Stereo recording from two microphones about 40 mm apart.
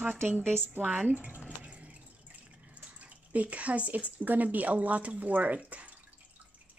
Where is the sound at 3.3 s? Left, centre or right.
Right.